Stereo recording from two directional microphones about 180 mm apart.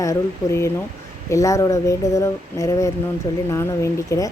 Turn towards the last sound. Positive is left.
turn(degrees=20)  # may be behind; listen again after turning